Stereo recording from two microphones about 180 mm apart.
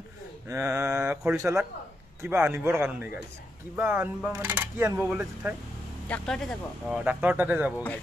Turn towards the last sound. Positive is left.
turn(degrees=-10)  # may be behind; listen again after turning